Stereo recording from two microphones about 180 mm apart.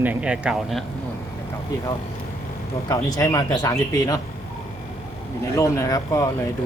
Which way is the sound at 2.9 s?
20° left (ahead or behind).